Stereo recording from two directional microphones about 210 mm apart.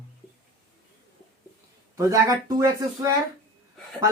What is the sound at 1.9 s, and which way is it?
Speech, 15° right (ahead or behind).